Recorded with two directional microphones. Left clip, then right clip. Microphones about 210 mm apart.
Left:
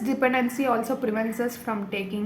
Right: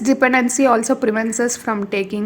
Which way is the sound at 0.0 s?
40° right (ahead or behind).